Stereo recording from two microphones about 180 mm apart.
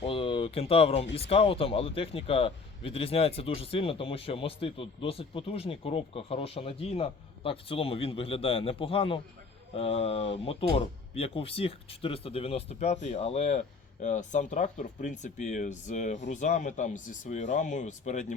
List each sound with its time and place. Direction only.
0.0 s speech: 30° left (ahead or behind)